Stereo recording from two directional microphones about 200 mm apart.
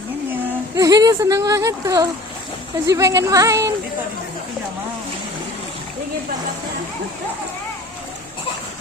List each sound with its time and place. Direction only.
0.8 s speech: 15° right (ahead or behind)